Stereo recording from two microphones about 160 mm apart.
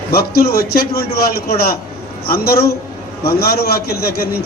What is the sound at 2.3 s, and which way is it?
A man's voice, 75° left (ahead or behind).